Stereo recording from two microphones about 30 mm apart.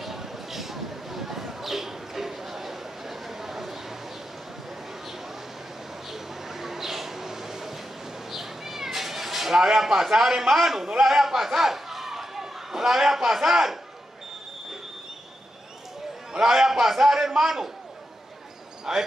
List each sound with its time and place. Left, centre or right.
0.0 s a sound: centre
6.0 s a sound: centre
8.3 s cat: centre
11.0 s a man's voice: centre
16.3 s a man's voice: centre
18.9 s a man's voice: centre